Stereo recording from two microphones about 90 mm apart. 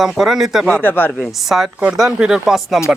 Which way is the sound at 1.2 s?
5° right (ahead or behind).